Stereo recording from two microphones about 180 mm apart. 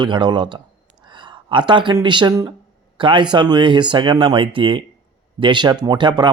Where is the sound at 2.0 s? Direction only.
25° right (ahead or behind).